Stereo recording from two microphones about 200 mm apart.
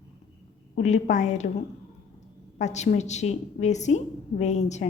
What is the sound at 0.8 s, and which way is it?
Speech, 35° left (ahead or behind).